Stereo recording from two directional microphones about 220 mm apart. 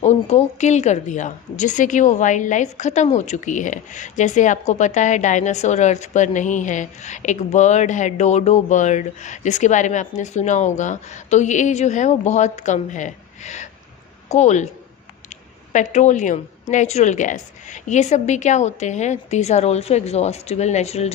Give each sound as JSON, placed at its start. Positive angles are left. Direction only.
{"t": 0.0, "sound": "a woman's voice", "side_deg": 30}